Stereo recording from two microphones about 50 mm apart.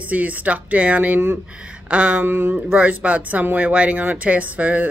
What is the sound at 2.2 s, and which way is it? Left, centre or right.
Speech, right.